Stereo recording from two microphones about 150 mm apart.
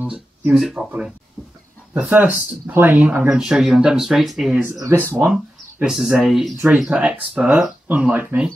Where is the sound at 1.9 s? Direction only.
10° right (ahead or behind).